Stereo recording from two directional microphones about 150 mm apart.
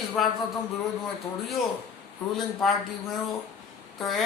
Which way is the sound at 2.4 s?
Centre (ahead or behind).